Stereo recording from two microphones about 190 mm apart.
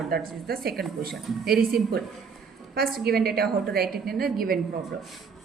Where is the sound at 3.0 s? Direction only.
55° right (ahead or behind).